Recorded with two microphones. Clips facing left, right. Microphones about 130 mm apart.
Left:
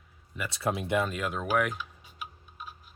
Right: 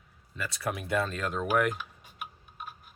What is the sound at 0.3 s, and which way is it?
Speech, 25° left (ahead or behind).